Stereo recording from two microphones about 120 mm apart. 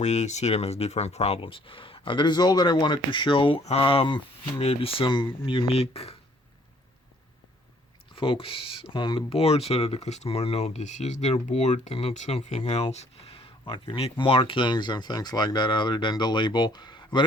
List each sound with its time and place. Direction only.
0.0 s speech: 70° left (ahead or behind); by 4.6 s 45° left (ahead or behind)
4.6 s speech: 55° left (ahead or behind)
8.1 s speech: 50° left (ahead or behind)